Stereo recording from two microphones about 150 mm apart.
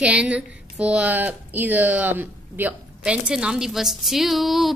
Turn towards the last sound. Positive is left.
turn(degrees=0)  # may be behind; listen again after turning